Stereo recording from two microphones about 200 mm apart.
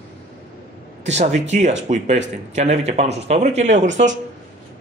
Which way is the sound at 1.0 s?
35° right (ahead or behind).